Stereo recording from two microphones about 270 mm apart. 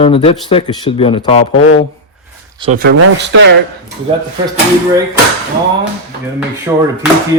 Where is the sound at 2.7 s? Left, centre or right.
Right.